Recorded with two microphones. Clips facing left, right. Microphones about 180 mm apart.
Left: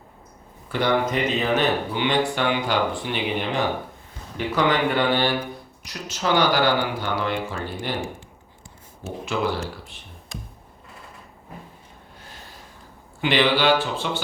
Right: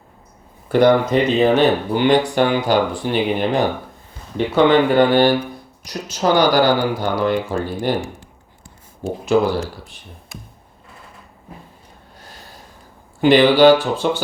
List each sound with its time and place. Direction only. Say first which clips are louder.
0.7 s speech: right 10 dB; 45° right (ahead or behind)
1.1 s speech: right 8 dB; 30° right (ahead or behind)
1.9 s speech: right 7 dB; 45° right (ahead or behind)
4.4 s speech: right 8 dB; 25° right (ahead or behind)
4.9 s speech: right 8 dB; 45° right (ahead or behind)
9.0 s speech: right 8 dB; 40° right (ahead or behind)
13.2 s speech: right 9 dB; 40° right (ahead or behind)